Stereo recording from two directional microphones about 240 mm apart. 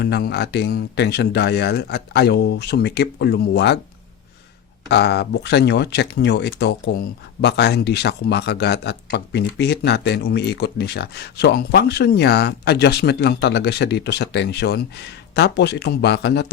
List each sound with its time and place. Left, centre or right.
0.0 s speech: left
4.9 s speech: left